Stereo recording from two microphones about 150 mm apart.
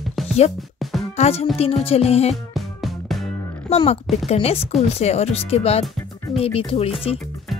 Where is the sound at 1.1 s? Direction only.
45° left (ahead or behind).